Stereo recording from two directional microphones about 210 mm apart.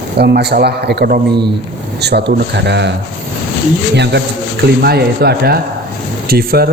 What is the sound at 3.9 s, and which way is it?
Speech, 55° right (ahead or behind).